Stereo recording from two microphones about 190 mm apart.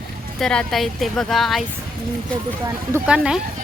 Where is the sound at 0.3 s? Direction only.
Centre (ahead or behind).